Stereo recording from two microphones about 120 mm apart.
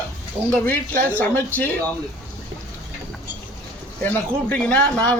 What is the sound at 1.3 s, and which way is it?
Speech, 15° left (ahead or behind).